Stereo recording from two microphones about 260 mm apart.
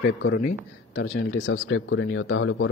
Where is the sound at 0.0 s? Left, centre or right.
Left.